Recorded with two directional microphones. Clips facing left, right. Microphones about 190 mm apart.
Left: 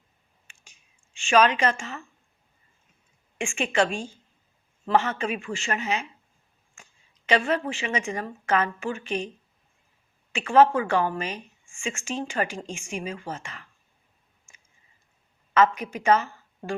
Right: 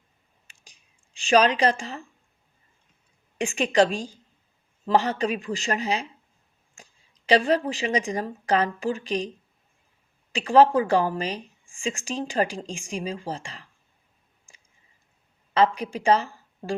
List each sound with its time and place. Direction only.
0.4 s a sound: 35° right (ahead or behind)
3.3 s speech: 35° right (ahead or behind)
10.3 s speech: 35° right (ahead or behind)
14.5 s clicking: 35° right (ahead or behind)
15.5 s speech: 35° right (ahead or behind)